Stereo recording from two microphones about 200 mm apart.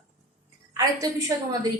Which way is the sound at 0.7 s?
15° right (ahead or behind).